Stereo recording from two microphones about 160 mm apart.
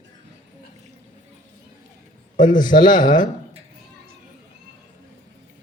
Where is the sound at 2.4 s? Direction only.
55° left (ahead or behind).